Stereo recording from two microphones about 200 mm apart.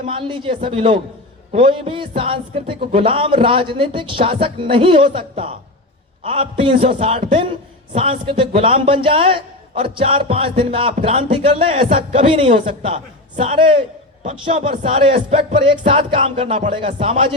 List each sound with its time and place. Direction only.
0.0 s a man's voice: 25° right (ahead or behind)